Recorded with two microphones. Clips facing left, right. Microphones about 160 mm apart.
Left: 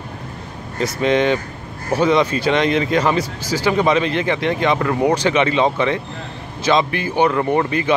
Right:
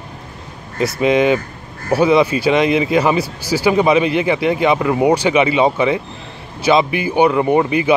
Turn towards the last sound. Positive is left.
turn(degrees=-15)  # may be behind; listen again after turning